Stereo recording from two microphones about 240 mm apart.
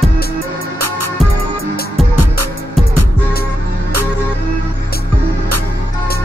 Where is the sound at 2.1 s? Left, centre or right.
Right.